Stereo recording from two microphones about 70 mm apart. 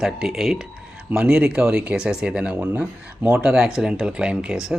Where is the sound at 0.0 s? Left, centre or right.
Centre.